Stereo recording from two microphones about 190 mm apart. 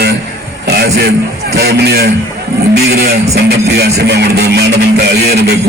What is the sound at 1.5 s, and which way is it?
Music, 60° right (ahead or behind).